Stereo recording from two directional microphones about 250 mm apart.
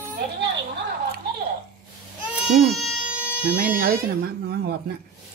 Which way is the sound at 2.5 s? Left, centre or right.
Centre.